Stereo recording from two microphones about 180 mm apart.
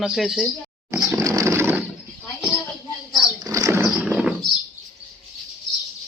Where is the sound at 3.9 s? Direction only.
5° right (ahead or behind).